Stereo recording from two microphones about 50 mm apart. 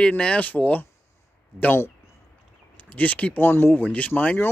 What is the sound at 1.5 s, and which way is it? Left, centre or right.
Speech, left.